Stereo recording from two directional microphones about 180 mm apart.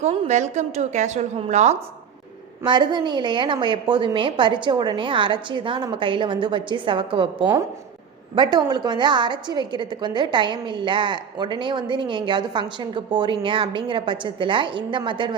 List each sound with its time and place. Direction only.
0.0 s a woman's voice: 40° right (ahead or behind)
2.6 s a woman's voice: 25° right (ahead or behind)